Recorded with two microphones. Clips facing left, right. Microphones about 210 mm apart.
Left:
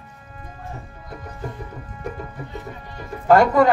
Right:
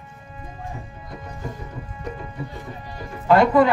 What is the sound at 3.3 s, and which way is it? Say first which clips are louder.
Speech: left 1 dB; 45° left (ahead or behind).